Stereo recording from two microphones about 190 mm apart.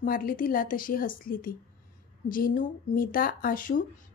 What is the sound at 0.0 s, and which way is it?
A woman's voice, 45° left (ahead or behind).